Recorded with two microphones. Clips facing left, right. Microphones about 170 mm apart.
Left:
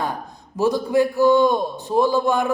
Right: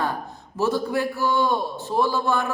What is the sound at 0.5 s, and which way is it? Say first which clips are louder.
A man's voice: left 4 dB; 15° left (ahead or behind).